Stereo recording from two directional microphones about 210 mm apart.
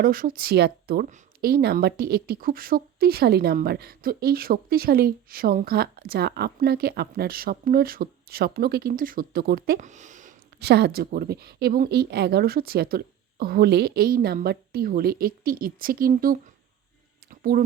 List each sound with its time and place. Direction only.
0.0 s speech: 45° right (ahead or behind)
10.6 s speech: 50° right (ahead or behind)
17.5 s speech: 45° right (ahead or behind)